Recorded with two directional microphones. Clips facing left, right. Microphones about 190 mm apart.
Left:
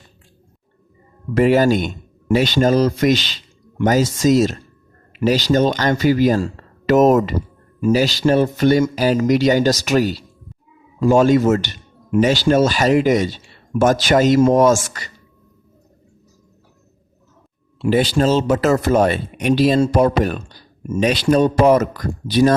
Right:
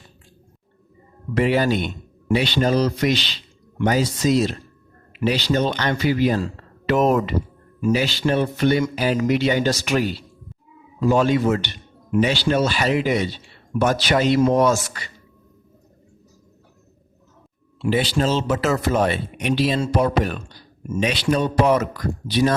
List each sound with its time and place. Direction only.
1.3 s a man's voice: 45° left (ahead or behind)
17.8 s a man's voice: 45° left (ahead or behind)